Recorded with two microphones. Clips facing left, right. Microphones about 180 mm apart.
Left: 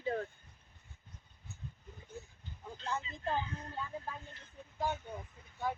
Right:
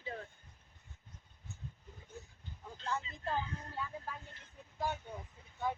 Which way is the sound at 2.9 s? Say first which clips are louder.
Left 1 dB; 20° left (ahead or behind).